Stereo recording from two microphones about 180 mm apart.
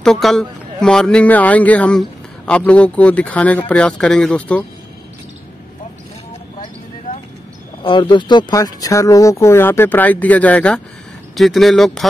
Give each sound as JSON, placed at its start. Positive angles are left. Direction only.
{"t": 0.0, "sound": "a man's voice", "side_deg": 0}
{"t": 7.8, "sound": "a man's voice", "side_deg": 25}